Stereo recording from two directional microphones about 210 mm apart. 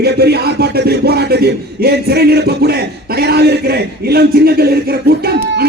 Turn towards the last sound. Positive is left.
turn(degrees=-50)  # may be behind; listen again after turning